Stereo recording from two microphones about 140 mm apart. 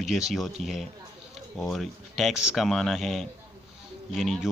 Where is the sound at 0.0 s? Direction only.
Centre (ahead or behind).